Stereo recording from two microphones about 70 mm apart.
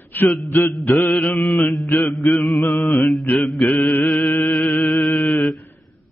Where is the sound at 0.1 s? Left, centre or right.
Left.